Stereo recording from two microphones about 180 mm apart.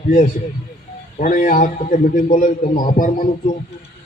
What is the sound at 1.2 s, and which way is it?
A man's voice, 45° left (ahead or behind).